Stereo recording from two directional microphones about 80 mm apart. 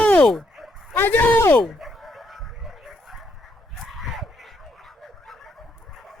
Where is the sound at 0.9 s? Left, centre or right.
Left.